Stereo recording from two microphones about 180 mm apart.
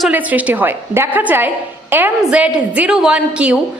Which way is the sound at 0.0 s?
10° right (ahead or behind).